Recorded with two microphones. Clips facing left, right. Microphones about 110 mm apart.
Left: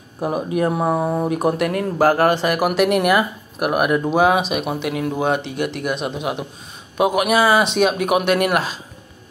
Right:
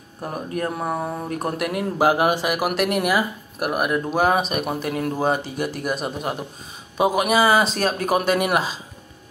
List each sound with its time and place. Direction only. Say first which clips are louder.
0.2 s speech: left 7 dB; 10° left (ahead or behind)
1.6 s speech: left 3 dB; 10° right (ahead or behind)
3.1 s speech: left 4 dB; 60° left (ahead or behind)
4.1 s speech: left 2 dB; centre (ahead or behind)